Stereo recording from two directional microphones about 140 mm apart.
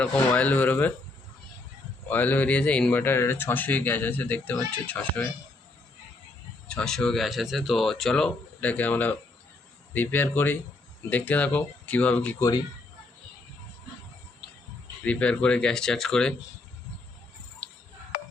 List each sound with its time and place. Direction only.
0.0 s speech: 10° left (ahead or behind)
2.0 s speech: 10° left (ahead or behind)
6.7 s speech: 5° left (ahead or behind)
12.4 s a man's voice: 25° left (ahead or behind)
15.0 s speech: 10° left (ahead or behind)